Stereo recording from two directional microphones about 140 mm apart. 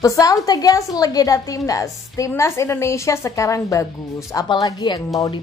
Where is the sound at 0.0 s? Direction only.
25° left (ahead or behind).